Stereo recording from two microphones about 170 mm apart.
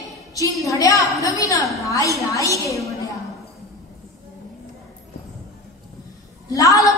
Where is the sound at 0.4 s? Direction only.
20° left (ahead or behind).